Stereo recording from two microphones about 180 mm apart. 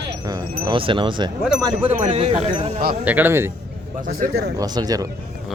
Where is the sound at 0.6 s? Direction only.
30° right (ahead or behind).